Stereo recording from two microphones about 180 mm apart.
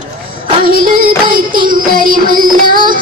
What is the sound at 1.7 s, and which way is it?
Child singing, 50° right (ahead or behind).